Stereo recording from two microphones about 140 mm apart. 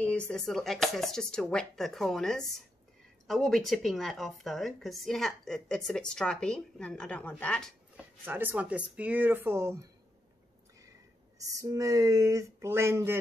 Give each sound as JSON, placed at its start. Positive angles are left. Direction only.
{"t": 0.0, "sound": "speech", "side_deg": 10}
{"t": 8.0, "sound": "speech", "side_deg": -15}
{"t": 11.3, "sound": "speech", "side_deg": -25}